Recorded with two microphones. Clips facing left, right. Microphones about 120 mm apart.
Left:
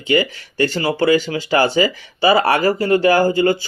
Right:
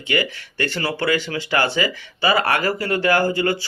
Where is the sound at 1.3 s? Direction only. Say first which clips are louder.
Left 5 dB; 20° left (ahead or behind); by 2.8 s 35° left (ahead or behind).